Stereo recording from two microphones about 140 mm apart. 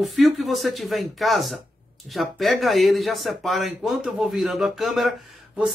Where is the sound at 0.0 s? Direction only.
Centre (ahead or behind).